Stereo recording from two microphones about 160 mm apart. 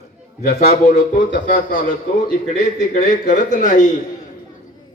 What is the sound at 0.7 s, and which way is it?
A man's voice, 55° left (ahead or behind).